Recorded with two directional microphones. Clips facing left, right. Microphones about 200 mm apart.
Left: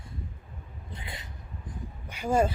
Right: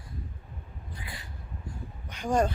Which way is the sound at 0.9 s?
25° left (ahead or behind).